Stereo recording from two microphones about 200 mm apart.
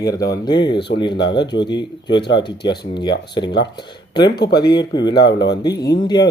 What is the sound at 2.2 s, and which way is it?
Speech, 55° left (ahead or behind).